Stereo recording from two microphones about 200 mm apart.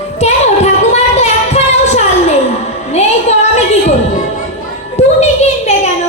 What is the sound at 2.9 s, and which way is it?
Music, 35° left (ahead or behind).